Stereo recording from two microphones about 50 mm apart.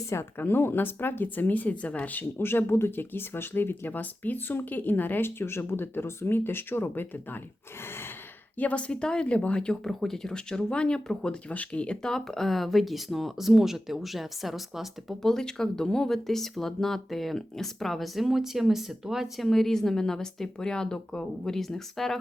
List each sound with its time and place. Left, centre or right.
0.3 s speech: left
2.4 s speech: left
8.5 s speech: left
11.4 s speech: left
12.0 s speech: centre
15.2 s speech: centre
19.4 s speech: centre